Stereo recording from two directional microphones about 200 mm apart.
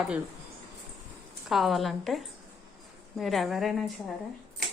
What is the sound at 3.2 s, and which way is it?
Speech, centre (ahead or behind).